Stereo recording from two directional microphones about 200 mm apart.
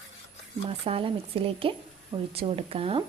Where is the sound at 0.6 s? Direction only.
30° right (ahead or behind).